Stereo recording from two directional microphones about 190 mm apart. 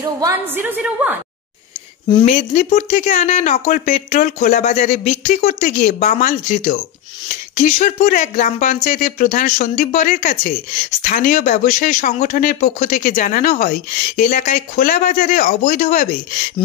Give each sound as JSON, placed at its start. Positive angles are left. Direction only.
{"t": 0.2, "sound": "a woman's voice", "side_deg": -10}
{"t": 2.2, "sound": "speech", "side_deg": 40}